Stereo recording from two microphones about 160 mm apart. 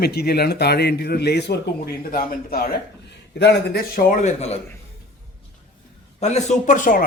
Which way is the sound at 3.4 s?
90° left.